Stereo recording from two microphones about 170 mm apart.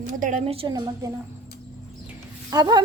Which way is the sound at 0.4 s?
35° right (ahead or behind).